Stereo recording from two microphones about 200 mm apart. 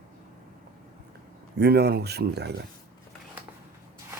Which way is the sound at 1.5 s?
55° right (ahead or behind).